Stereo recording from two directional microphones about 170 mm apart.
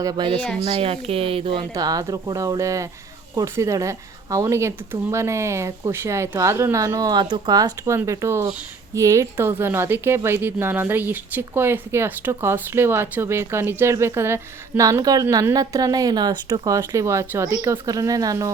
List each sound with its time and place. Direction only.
0.0 s speech: 25° right (ahead or behind)
0.3 s speech: 5° left (ahead or behind)
0.6 s speech: 35° right (ahead or behind)
1.7 s a woman's voice: 20° right (ahead or behind)